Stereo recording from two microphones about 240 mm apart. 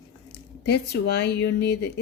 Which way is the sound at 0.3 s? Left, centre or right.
Left.